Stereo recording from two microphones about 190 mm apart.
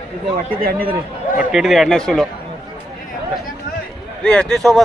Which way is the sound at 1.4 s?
Centre (ahead or behind).